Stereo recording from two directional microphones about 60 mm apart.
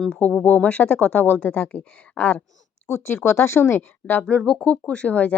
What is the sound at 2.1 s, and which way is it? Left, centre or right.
Speech, left.